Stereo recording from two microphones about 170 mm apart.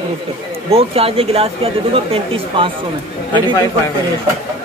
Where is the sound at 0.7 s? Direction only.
35° right (ahead or behind).